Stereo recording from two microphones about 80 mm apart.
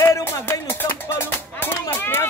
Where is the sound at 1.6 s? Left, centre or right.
Left.